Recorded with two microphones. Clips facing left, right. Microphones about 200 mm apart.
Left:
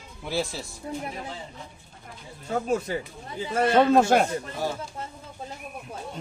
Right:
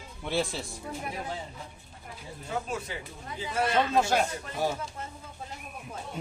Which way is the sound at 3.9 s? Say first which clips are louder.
Left 6 dB; 55° left (ahead or behind).